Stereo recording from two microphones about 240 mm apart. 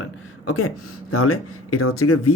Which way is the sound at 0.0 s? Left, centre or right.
Left.